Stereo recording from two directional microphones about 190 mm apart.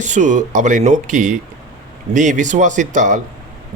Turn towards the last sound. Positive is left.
turn(degrees=-40)  # may be behind; listen again after turning